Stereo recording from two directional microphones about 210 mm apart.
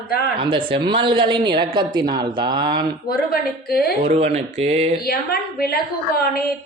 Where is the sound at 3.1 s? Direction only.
45° left (ahead or behind).